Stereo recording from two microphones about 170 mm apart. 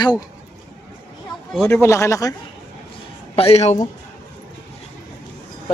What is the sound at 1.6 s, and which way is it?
Speech, 15° left (ahead or behind).